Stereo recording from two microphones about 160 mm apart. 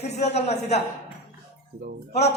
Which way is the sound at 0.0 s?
45° left (ahead or behind).